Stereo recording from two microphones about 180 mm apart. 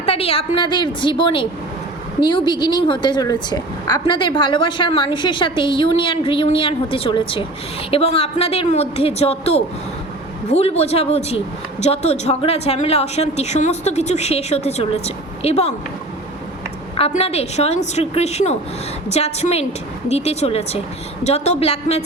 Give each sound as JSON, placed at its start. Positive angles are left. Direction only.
{"t": 0.0, "sound": "a woman's voice", "side_deg": 35}
{"t": 17.0, "sound": "a woman's voice", "side_deg": 35}